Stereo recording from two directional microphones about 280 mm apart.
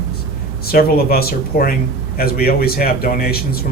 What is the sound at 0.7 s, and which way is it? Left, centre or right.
A man's voice, left.